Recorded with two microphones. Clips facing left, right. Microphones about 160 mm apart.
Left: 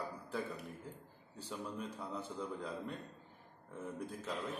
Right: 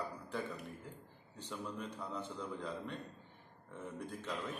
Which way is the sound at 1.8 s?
10° left (ahead or behind).